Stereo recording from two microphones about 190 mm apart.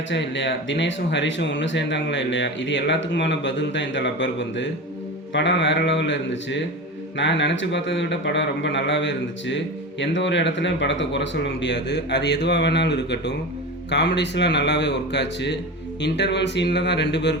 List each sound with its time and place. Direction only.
0.1 s a man's voice: 70° left (ahead or behind)